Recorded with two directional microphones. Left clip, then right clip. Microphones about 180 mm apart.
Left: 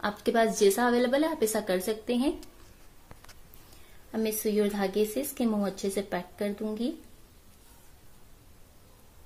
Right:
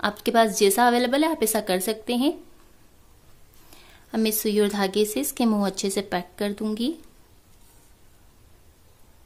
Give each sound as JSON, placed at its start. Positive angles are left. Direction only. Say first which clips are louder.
{"t": 0.0, "sound": "speech", "louder": "right 5 dB", "side_deg": -30}
{"t": 4.1, "sound": "speech", "louder": "right 5 dB", "side_deg": -40}